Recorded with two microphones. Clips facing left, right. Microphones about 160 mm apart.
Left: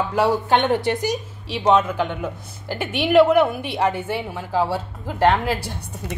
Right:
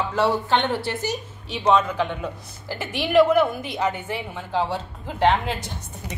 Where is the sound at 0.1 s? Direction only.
10° left (ahead or behind).